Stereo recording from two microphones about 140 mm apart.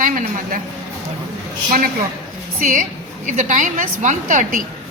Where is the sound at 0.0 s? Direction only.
70° right (ahead or behind).